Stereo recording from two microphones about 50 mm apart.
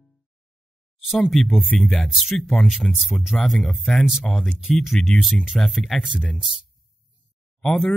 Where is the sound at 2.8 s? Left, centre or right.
Centre.